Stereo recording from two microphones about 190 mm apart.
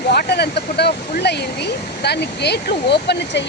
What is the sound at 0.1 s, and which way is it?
Speech, 55° left (ahead or behind).